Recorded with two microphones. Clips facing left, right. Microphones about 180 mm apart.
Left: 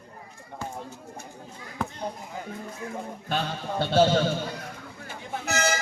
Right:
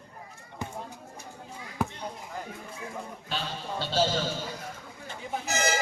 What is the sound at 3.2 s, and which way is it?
Sheep, 55° left (ahead or behind).